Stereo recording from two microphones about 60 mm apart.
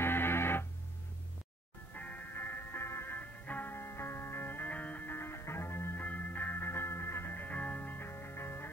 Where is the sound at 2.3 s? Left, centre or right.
Left.